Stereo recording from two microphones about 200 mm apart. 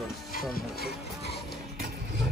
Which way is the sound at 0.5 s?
50° left (ahead or behind).